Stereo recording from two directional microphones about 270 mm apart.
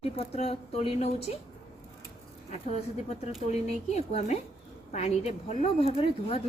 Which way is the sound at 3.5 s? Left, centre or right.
Left.